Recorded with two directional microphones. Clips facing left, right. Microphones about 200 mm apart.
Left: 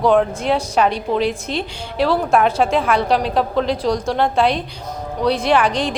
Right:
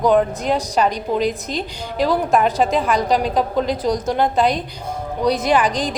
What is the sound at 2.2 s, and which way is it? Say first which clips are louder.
A woman's voice: left 1 dB; centre (ahead or behind).